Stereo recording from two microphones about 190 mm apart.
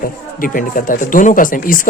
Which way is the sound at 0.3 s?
45° left (ahead or behind).